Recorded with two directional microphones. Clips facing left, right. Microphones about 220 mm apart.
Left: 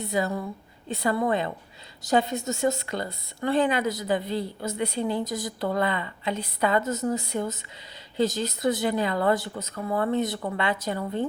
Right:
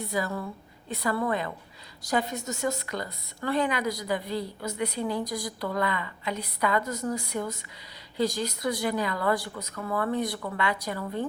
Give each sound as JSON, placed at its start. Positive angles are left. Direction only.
{"t": 0.0, "sound": "speech", "side_deg": 25}